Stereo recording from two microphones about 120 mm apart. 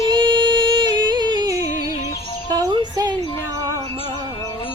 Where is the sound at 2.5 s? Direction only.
35° right (ahead or behind).